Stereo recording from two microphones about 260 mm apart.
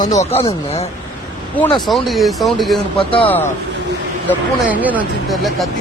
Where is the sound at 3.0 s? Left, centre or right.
Left.